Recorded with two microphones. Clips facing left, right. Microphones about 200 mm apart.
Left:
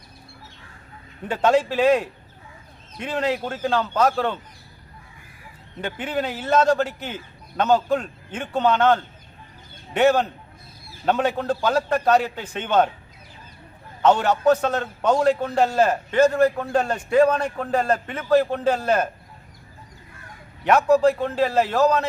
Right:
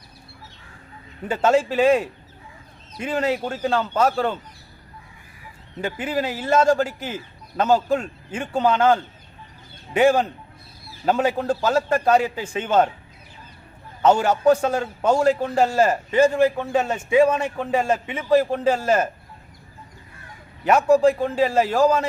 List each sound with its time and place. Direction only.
1.3 s speech: 5° right (ahead or behind)
5.8 s a man's voice: 5° right (ahead or behind)
14.0 s a man's voice: 10° right (ahead or behind)
20.7 s a man's voice: 10° right (ahead or behind)